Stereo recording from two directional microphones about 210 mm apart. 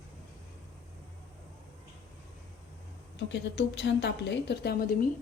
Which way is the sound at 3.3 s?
55° left (ahead or behind).